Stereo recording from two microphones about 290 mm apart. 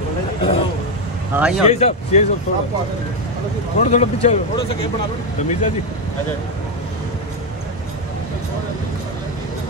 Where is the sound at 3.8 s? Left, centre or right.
Left.